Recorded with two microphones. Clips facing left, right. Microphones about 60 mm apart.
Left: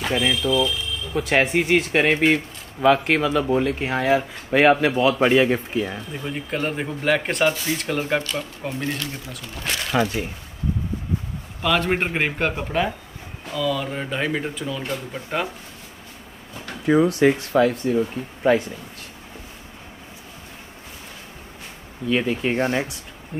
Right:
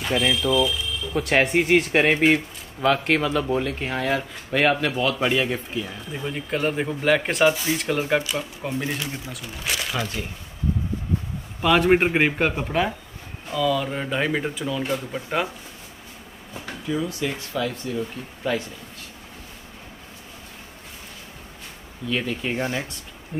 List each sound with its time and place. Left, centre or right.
0.1 s speech: centre
5.9 s speech: centre
9.3 s speech: centre
11.6 s speech: centre
16.8 s speech: left
22.1 s speech: centre